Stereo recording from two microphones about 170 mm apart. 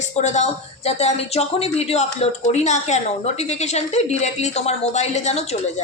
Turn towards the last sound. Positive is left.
turn(degrees=40)  # may be behind; listen again after turning